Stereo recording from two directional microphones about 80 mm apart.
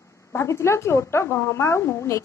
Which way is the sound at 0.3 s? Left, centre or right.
Left.